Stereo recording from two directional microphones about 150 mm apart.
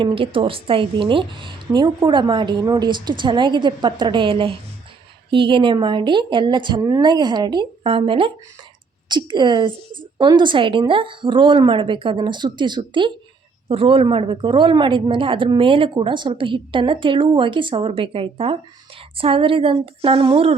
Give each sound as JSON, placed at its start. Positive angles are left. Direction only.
{"t": 0.0, "sound": "a woman's voice", "side_deg": -35}